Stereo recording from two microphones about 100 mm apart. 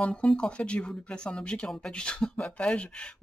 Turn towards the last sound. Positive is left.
turn(degrees=10)  # may be behind; listen again after turning